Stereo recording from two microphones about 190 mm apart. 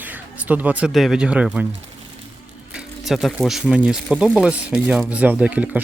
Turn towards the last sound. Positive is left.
turn(degrees=-5)  # may be behind; listen again after turning